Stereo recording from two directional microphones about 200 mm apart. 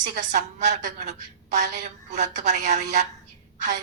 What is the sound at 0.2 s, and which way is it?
A woman's voice, 40° right (ahead or behind).